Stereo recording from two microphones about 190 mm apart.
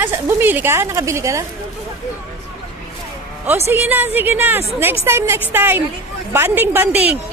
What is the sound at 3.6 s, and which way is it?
A woman's voice, 10° right (ahead or behind).